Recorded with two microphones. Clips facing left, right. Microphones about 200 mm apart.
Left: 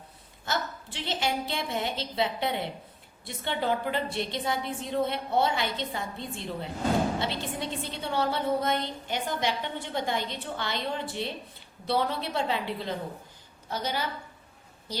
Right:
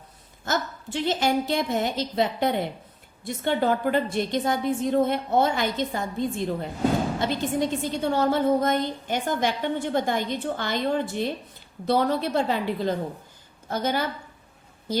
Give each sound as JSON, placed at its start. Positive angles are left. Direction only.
{"t": 0.4, "sound": "a woman's voice", "side_deg": -45}